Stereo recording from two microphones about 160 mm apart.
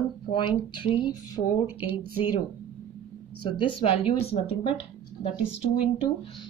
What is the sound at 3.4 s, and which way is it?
Speech, 30° left (ahead or behind).